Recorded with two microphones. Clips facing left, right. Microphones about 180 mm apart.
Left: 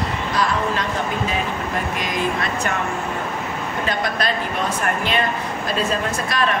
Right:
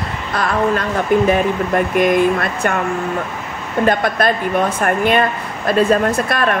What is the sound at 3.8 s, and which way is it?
Speech, 55° right (ahead or behind).